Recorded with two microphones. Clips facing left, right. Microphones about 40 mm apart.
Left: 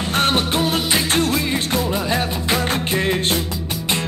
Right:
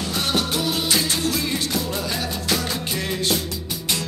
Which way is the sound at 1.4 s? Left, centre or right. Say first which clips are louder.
Left 4 dB; left.